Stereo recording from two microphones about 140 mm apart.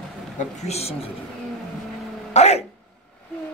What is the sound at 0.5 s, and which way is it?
Speech, 50° left (ahead or behind).